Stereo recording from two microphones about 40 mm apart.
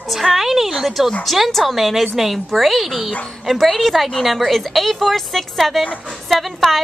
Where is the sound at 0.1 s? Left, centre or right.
Centre.